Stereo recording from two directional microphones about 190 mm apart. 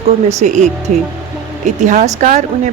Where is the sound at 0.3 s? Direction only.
35° right (ahead or behind).